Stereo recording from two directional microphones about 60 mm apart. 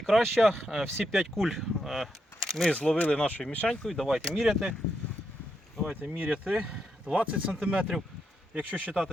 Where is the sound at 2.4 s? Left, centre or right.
Centre.